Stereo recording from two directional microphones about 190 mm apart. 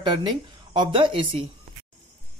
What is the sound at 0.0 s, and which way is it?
Speech, 25° right (ahead or behind).